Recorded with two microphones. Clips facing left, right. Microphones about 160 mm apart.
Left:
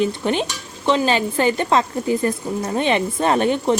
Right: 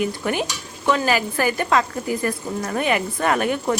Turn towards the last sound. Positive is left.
turn(degrees=25)  # may be behind; listen again after turning